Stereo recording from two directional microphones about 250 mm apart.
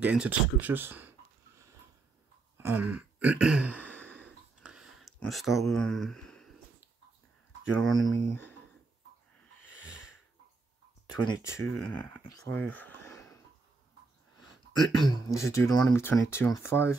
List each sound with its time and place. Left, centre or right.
0.0 s speech: centre
2.5 s throat clearing: centre
4.0 s a sound: centre
7.7 s speech: centre
9.7 s snort: centre
11.2 s speech: centre
14.7 s speech: centre